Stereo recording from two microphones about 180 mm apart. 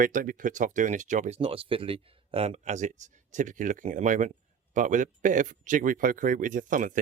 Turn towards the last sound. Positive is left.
turn(degrees=-45)  # may be behind; listen again after turning